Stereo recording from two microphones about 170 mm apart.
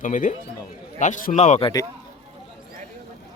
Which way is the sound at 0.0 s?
50° left (ahead or behind).